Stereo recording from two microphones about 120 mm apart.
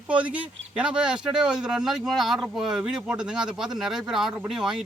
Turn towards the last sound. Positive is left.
turn(degrees=-5)  # may be behind; listen again after turning